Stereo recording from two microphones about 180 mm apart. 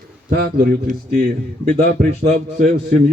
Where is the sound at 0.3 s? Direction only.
55° right (ahead or behind).